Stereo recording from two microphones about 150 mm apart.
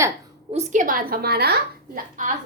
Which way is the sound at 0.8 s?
75° right (ahead or behind).